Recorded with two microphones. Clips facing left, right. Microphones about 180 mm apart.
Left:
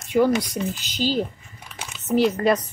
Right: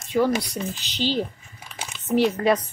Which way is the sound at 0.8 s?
45° left (ahead or behind).